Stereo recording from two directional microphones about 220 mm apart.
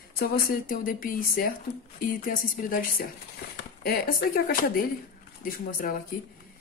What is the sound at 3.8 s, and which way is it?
Speech, 40° left (ahead or behind).